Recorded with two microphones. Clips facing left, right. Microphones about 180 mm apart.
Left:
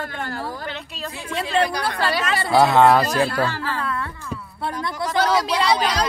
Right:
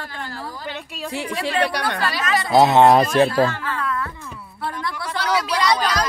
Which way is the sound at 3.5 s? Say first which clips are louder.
Even; 30° left (ahead or behind).